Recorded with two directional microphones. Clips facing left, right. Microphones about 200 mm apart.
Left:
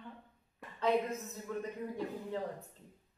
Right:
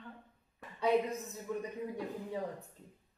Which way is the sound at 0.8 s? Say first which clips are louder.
Right 1 dB; 15° right (ahead or behind).